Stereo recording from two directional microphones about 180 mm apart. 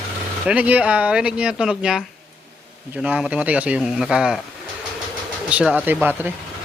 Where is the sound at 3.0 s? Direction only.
10° right (ahead or behind).